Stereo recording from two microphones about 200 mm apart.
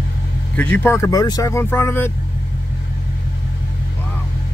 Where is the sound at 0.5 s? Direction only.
10° left (ahead or behind).